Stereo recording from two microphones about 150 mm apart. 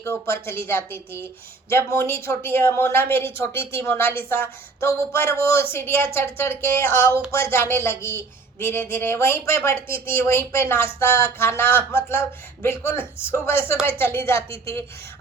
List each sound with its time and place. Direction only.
0.0 s speech: 15° left (ahead or behind)